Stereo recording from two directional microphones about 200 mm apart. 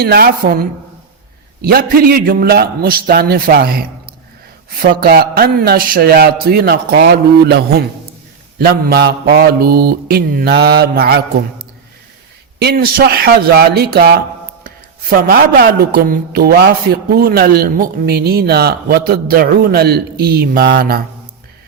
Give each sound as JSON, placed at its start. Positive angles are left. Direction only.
{"t": 0.0, "sound": "a man's voice", "side_deg": -50}
{"t": 4.9, "sound": "a man's voice", "side_deg": -50}
{"t": 12.5, "sound": "a man's voice", "side_deg": -50}